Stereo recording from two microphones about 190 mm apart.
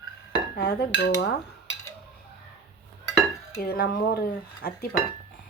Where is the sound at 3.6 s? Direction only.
55° left (ahead or behind).